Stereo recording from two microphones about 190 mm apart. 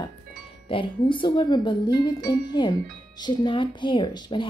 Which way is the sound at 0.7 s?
25° left (ahead or behind).